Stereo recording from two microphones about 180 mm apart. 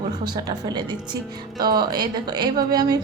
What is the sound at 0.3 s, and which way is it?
Speech, 20° right (ahead or behind).